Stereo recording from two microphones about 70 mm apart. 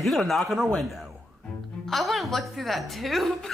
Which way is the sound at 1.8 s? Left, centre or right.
Centre.